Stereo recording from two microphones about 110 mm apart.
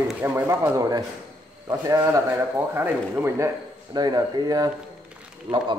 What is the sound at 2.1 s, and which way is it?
Speech, 20° right (ahead or behind).